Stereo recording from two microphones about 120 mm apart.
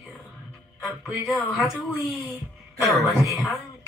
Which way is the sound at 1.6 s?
Centre (ahead or behind).